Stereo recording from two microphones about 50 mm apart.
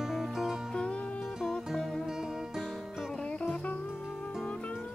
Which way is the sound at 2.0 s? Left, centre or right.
Centre.